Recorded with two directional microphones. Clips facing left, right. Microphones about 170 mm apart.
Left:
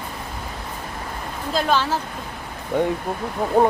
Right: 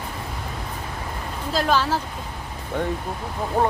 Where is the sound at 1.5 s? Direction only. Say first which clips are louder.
Even; centre (ahead or behind).